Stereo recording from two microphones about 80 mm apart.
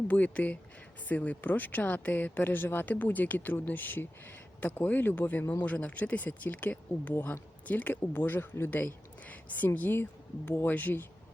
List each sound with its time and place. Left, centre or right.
0.1 s speech: centre